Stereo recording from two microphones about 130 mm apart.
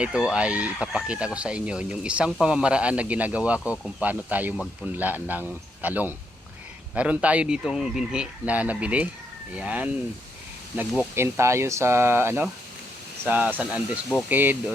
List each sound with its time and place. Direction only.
0.0 s speech: 5° right (ahead or behind)
4.5 s speech: centre (ahead or behind)
4.9 s speech: 10° right (ahead or behind)